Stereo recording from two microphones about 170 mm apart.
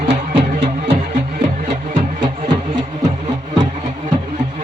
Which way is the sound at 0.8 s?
55° right (ahead or behind).